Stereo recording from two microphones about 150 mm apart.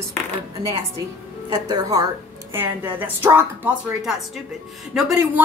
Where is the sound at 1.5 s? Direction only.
25° right (ahead or behind).